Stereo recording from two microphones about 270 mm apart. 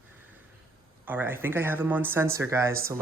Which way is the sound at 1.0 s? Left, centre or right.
Centre.